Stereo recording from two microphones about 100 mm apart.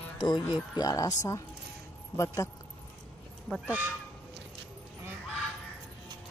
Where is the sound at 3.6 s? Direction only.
15° right (ahead or behind).